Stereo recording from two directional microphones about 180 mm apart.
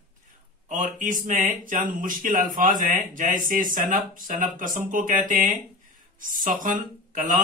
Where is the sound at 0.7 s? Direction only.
45° right (ahead or behind).